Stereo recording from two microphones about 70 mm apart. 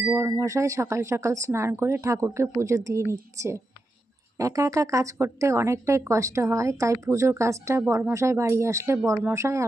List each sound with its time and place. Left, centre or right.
0.2 s speech: right